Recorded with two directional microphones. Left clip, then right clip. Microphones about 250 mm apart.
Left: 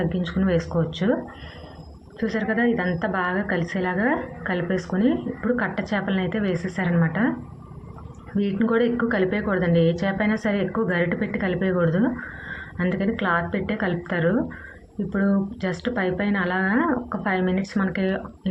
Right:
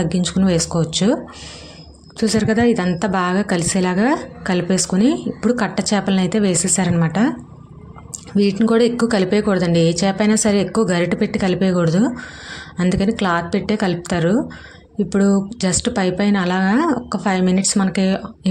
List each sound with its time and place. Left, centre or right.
0.0 s speech: right
8.4 s speech: right